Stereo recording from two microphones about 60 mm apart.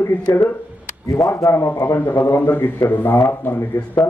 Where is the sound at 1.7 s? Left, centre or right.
Left.